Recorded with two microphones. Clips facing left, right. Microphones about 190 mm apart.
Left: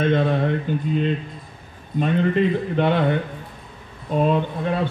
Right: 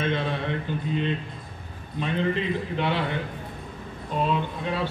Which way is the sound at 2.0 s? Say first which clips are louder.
Left 7 dB; 50° left (ahead or behind).